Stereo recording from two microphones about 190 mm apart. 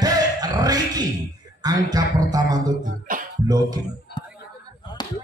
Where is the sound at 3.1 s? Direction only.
45° right (ahead or behind).